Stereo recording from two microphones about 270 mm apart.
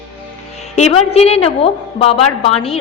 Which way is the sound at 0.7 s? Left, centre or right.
Left.